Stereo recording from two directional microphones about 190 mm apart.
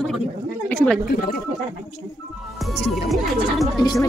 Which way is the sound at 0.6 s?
5° left (ahead or behind).